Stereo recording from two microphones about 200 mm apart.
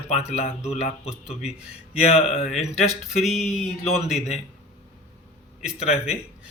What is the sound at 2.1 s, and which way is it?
Speech, 30° left (ahead or behind).